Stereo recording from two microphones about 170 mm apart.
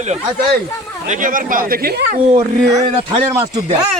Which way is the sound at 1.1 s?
55° right (ahead or behind).